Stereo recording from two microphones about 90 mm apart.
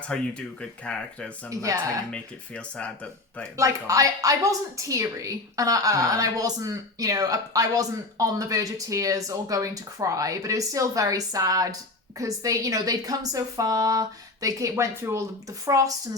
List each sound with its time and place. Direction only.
0.1 s speech: 10° left (ahead or behind)
1.5 s a woman's voice: 40° right (ahead or behind)
2.1 s speech: 10° left (ahead or behind)
3.6 s a woman's voice: 40° right (ahead or behind)